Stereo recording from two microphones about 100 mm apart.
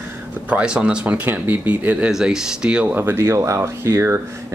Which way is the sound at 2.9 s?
25° right (ahead or behind).